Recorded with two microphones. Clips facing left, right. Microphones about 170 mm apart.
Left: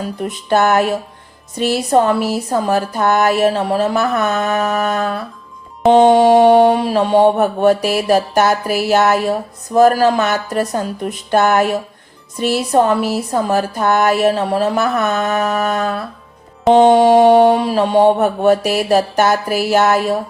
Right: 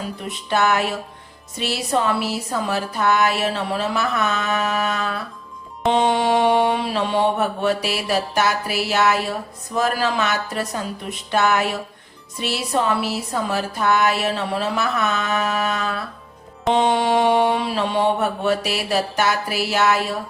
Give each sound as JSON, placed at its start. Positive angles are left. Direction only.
{"t": 0.2, "sound": "a woman's voice", "side_deg": 45}